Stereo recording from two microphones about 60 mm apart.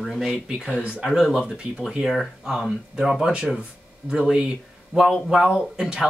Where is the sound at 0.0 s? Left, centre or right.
Centre.